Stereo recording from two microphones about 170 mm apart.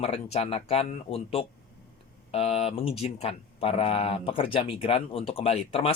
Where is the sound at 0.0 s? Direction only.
40° left (ahead or behind).